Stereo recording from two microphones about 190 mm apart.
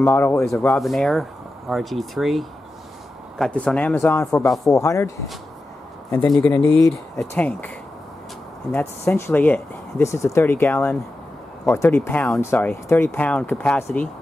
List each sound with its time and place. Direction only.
0.0 s speech: 10° left (ahead or behind)
6.1 s speech: 5° left (ahead or behind)
8.7 s speech: 10° left (ahead or behind)